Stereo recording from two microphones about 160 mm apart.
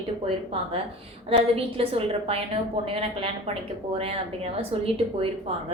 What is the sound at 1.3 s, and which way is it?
A woman's voice, 35° right (ahead or behind).